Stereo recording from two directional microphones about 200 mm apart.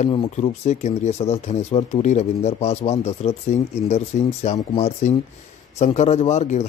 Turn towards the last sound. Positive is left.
turn(degrees=35)  # may be behind; listen again after turning